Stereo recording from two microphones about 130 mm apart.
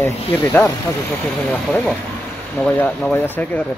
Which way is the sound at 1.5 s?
5° left (ahead or behind).